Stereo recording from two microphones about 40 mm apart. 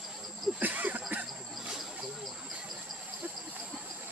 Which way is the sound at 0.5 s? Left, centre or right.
Right.